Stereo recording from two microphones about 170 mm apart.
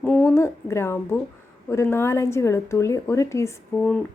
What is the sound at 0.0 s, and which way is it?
Speech, 5° left (ahead or behind).